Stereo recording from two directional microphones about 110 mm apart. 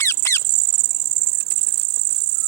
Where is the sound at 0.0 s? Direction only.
25° left (ahead or behind).